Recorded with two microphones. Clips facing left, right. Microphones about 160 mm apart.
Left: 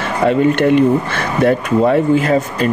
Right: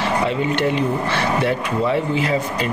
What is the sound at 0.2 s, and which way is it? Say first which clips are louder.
Speech: left 7 dB; 55° left (ahead or behind).